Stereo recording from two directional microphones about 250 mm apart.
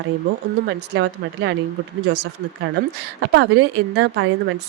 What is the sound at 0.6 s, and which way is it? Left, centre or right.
Speech, right.